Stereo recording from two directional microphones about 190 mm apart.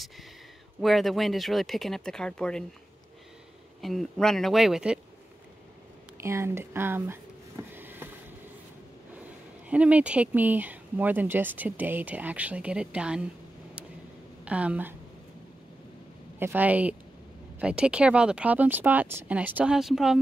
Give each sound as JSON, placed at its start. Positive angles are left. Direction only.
{"t": 0.7, "sound": "speech", "side_deg": 0}
{"t": 3.8, "sound": "speech", "side_deg": 0}
{"t": 6.2, "sound": "a sound", "side_deg": -15}
{"t": 9.7, "sound": "speech", "side_deg": -5}
{"t": 14.4, "sound": "a woman's voice", "side_deg": -5}
{"t": 16.3, "sound": "speech", "side_deg": -10}